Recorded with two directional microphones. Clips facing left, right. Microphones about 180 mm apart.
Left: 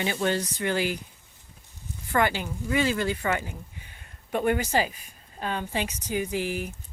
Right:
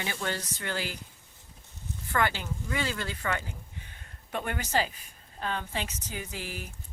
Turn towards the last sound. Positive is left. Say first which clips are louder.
# left 10 dB
turn(degrees=15)  # may be behind; listen again after turning